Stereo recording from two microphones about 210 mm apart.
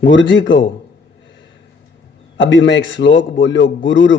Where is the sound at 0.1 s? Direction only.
60° left (ahead or behind).